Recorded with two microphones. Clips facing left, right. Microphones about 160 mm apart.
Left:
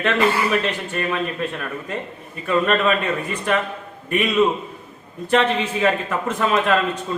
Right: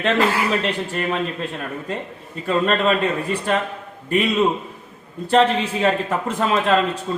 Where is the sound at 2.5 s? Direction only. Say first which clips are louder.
Even; 30° right (ahead or behind).